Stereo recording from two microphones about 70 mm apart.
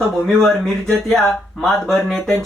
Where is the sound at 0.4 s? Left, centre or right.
Centre.